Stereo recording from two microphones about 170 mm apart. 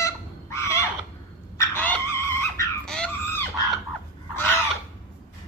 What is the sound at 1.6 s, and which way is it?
Dog, 15° left (ahead or behind).